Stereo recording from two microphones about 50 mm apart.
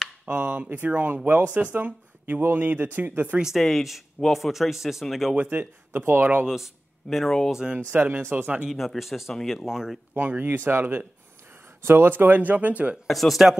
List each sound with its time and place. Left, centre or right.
0.2 s speech: right
1.4 s speech: right
1.7 s speech: right
3.5 s speech: centre
5.5 s speech: right
6.4 s speech: centre
7.5 s speech: centre
7.9 s speech: right
8.6 s speech: centre
9.3 s speech: centre
9.7 s speech: centre
10.1 s speech: right
13.0 s speech: centre